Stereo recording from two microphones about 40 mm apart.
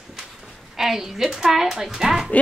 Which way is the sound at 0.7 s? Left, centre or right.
Centre.